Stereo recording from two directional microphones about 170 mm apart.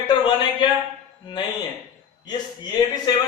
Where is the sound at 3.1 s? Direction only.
25° left (ahead or behind).